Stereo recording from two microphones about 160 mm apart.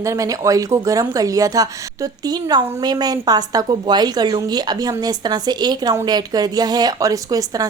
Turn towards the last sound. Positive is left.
turn(degrees=-20)  # may be behind; listen again after turning